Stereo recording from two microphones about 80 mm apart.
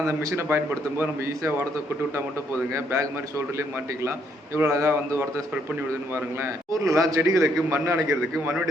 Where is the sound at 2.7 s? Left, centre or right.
Right.